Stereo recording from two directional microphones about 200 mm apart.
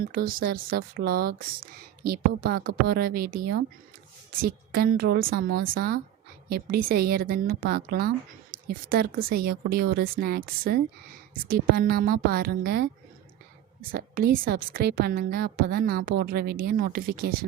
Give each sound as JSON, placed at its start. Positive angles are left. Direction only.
{"t": 0.0, "sound": "speech", "side_deg": -45}
{"t": 13.9, "sound": "speech", "side_deg": -45}